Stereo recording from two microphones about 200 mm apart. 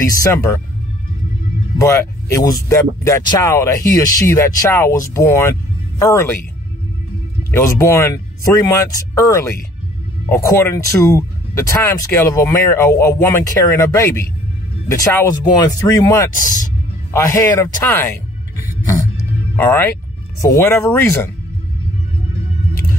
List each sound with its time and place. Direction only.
0.1 s speech: 15° left (ahead or behind)
1.8 s speech: 15° left (ahead or behind)
7.5 s speech: 15° left (ahead or behind)
19.5 s speech: 10° left (ahead or behind)